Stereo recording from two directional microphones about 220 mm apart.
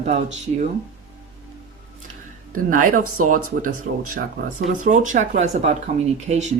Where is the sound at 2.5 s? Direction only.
40° right (ahead or behind).